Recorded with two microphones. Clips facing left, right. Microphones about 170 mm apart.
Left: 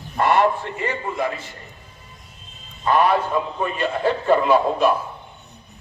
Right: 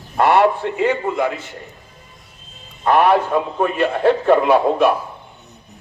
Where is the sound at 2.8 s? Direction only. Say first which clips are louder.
Right 4 dB; 65° right (ahead or behind).